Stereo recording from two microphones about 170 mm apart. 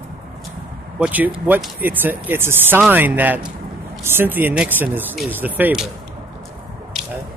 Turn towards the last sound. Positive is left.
turn(degrees=-5)  # may be behind; listen again after turning